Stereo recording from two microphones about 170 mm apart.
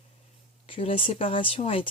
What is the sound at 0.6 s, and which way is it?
Speech, 35° left (ahead or behind).